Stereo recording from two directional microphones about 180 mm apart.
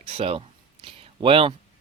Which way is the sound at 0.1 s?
35° right (ahead or behind).